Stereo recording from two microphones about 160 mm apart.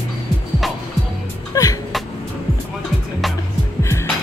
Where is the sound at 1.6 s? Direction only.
20° left (ahead or behind).